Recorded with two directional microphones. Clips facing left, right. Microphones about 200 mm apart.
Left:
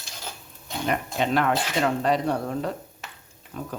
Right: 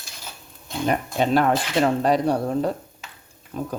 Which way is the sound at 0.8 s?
35° right (ahead or behind).